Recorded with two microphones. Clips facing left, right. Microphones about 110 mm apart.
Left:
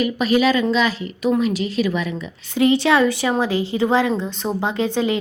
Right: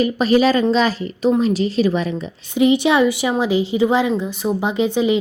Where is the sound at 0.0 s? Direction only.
35° right (ahead or behind).